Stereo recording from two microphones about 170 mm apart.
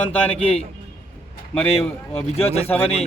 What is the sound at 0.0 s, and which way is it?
Speech, 10° left (ahead or behind).